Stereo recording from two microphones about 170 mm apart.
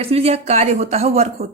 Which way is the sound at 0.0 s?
35° right (ahead or behind).